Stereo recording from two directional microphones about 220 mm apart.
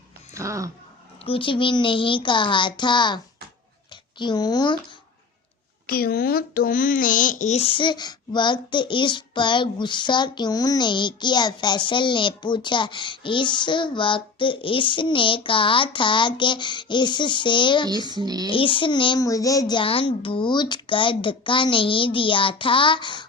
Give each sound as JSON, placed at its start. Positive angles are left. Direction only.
{"t": 0.3, "sound": "speech", "side_deg": -15}
{"t": 1.2, "sound": "speech", "side_deg": 25}
{"t": 4.2, "sound": "speech", "side_deg": 20}
{"t": 5.9, "sound": "speech", "side_deg": 45}
{"t": 18.1, "sound": "speech", "side_deg": -20}
{"t": 18.4, "sound": "speech", "side_deg": 25}